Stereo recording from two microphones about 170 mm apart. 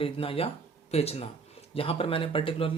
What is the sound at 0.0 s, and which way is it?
Speech, 35° left (ahead or behind).